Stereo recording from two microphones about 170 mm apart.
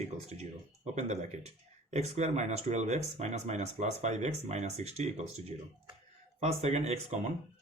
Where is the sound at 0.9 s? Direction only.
40° right (ahead or behind).